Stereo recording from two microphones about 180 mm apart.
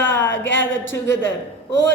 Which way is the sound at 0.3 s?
90° left.